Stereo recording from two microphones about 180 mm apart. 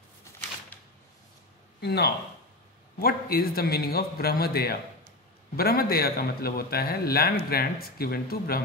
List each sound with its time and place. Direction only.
1.8 s a man's voice: 65° left (ahead or behind)